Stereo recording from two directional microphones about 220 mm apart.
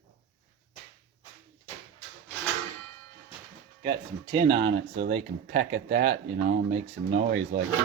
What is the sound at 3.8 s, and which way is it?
Speech, 25° right (ahead or behind).